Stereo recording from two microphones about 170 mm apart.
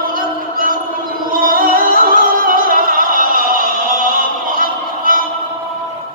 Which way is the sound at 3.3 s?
60° left (ahead or behind).